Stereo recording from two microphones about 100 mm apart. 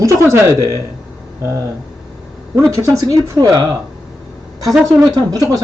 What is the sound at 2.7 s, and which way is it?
Speech, 35° right (ahead or behind).